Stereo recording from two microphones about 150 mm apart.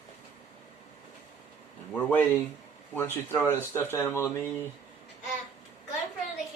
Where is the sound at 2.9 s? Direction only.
15° left (ahead or behind).